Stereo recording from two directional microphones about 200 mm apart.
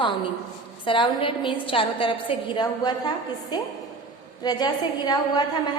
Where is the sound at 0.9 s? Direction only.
25° left (ahead or behind).